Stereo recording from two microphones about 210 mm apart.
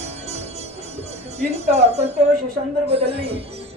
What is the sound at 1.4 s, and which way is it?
Music, 30° right (ahead or behind).